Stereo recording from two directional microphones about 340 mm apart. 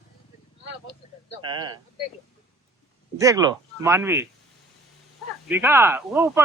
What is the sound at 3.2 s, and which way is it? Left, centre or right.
Speech, centre.